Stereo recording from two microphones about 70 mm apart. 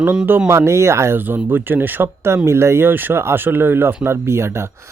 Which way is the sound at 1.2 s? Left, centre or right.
Right.